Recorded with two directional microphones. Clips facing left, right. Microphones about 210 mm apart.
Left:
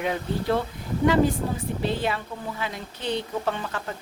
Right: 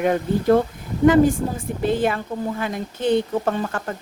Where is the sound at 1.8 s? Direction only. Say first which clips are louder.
Right 7 dB; 50° right (ahead or behind).